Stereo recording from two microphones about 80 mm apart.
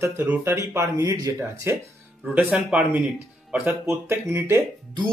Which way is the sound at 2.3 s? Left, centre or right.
Centre.